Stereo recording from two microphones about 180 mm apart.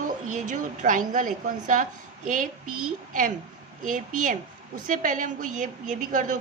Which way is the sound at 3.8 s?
45° right (ahead or behind).